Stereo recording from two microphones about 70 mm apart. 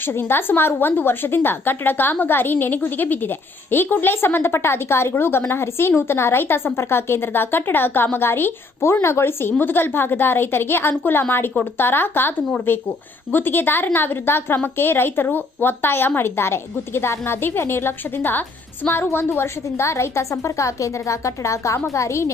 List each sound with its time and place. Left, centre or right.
0.0 s speech: left
13.3 s a woman's voice: left